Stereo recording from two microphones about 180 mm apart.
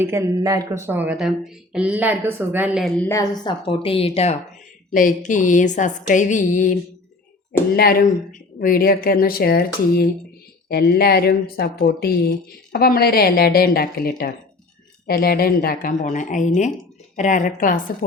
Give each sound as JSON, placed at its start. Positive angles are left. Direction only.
{"t": 0.0, "sound": "speech", "side_deg": -15}
{"t": 3.0, "sound": "speech", "side_deg": 15}
{"t": 4.9, "sound": "a woman's voice", "side_deg": 45}
{"t": 7.8, "sound": "speech", "side_deg": 55}
{"t": 10.7, "sound": "a woman's voice", "side_deg": 60}